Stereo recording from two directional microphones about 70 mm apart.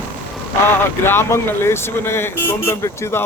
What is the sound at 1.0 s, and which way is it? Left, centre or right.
Speech, left.